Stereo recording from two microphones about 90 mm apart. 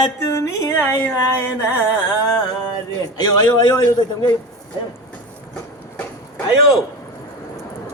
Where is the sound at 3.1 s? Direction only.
50° left (ahead or behind).